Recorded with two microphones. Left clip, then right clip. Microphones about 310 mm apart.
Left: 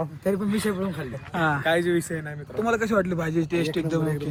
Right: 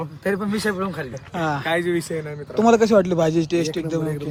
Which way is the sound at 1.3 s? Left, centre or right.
Centre.